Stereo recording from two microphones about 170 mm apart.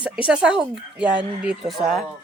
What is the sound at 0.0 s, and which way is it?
Speech, 5° right (ahead or behind).